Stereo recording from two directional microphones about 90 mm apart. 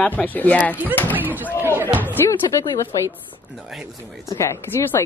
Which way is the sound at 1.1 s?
20° right (ahead or behind).